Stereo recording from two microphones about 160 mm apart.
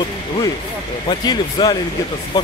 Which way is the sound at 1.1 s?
25° left (ahead or behind).